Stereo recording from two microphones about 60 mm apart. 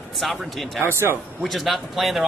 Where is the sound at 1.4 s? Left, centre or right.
Centre.